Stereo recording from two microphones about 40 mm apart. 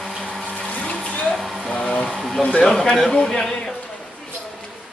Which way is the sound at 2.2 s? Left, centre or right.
Centre.